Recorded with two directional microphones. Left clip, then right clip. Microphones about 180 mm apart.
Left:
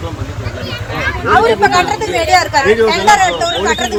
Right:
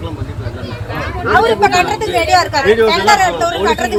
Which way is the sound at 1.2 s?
55° right (ahead or behind).